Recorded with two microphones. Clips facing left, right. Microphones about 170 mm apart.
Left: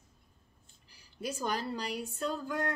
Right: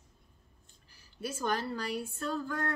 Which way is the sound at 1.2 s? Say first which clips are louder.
Right 1 dB; 15° left (ahead or behind).